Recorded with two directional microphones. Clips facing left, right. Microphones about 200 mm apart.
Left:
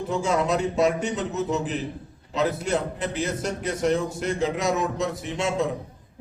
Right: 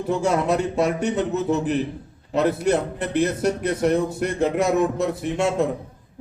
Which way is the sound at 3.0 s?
60° right (ahead or behind).